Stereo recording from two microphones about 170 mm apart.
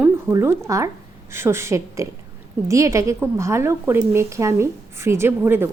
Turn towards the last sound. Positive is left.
turn(degrees=-15)  # may be behind; listen again after turning